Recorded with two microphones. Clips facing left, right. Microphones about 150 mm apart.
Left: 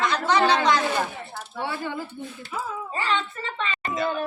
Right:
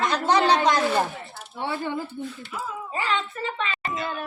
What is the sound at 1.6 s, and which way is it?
Speech, 15° right (ahead or behind).